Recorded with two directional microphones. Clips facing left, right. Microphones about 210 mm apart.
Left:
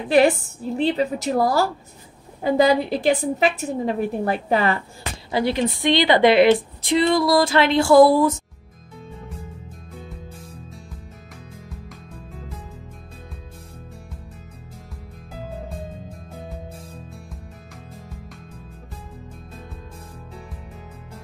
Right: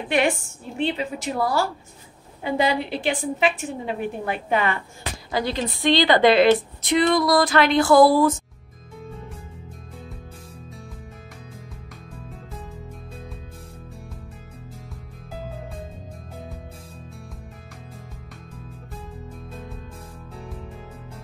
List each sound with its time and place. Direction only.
0.1 s a woman's voice: 35° left (ahead or behind)
5.3 s a woman's voice: 20° left (ahead or behind)